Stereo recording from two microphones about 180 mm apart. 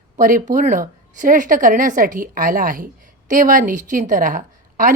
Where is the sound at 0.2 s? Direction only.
50° right (ahead or behind).